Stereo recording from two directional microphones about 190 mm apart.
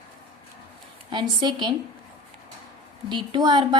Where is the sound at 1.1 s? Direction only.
25° right (ahead or behind).